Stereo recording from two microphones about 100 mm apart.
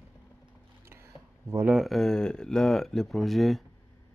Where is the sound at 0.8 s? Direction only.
25° right (ahead or behind).